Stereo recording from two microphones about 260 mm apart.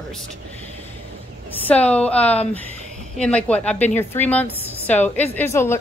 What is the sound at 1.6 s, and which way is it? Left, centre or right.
Speech, centre.